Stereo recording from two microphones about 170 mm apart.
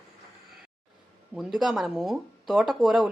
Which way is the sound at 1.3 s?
Centre (ahead or behind).